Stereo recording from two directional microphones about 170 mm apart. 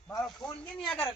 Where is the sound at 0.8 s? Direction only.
10° left (ahead or behind).